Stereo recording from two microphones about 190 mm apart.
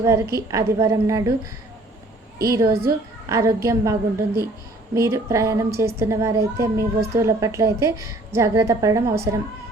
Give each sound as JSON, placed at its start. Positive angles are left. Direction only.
{"t": 0.3, "sound": "a woman's voice", "side_deg": -15}
{"t": 2.5, "sound": "a woman's voice", "side_deg": -15}